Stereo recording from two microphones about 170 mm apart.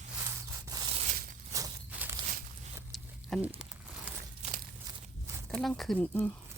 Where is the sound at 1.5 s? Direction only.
20° right (ahead or behind).